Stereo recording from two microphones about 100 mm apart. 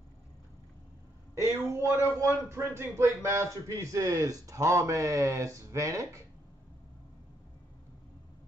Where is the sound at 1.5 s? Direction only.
25° right (ahead or behind).